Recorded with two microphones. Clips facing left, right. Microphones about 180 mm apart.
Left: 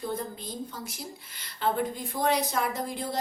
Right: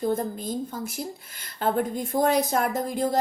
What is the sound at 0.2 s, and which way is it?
Speech, 50° right (ahead or behind).